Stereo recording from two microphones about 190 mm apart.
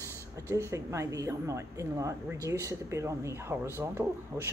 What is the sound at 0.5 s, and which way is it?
A woman's voice, 15° right (ahead or behind).